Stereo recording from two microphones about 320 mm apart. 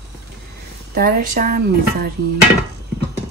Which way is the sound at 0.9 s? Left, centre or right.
Right.